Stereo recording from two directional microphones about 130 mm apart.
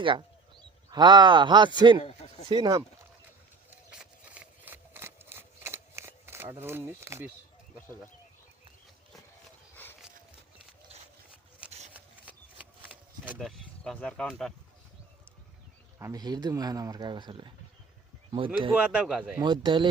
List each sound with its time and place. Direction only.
0.0 s speech: 40° right (ahead or behind)
2.0 s speech: 50° left (ahead or behind)
2.5 s speech: 35° right (ahead or behind)
3.9 s a sound: 10° right (ahead or behind)
11.9 s a sound: 10° right (ahead or behind)
13.4 s speech: 5° left (ahead or behind)
16.0 s speech: 20° right (ahead or behind); by 18.7 s 40° right (ahead or behind)
18.7 s speech: 10° right (ahead or behind)
19.4 s speech: 35° right (ahead or behind)